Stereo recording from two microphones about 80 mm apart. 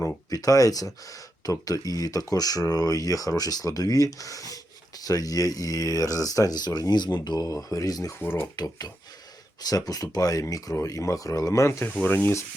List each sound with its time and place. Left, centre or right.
0.3 s speech: left
7.4 s speech: left
8.2 s speech: left
8.5 s speech: left
12.0 s speech: left